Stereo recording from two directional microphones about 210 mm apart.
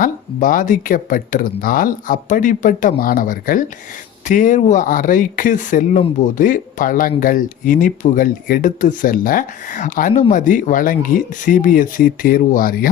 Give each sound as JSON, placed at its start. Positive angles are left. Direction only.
{"t": 0.0, "sound": "speech", "side_deg": 40}